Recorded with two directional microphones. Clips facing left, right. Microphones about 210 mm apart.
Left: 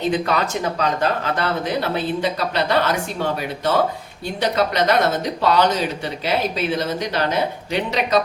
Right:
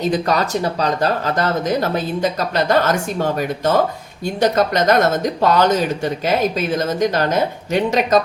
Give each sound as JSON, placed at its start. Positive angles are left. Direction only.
{"t": 0.0, "sound": "speech", "side_deg": -40}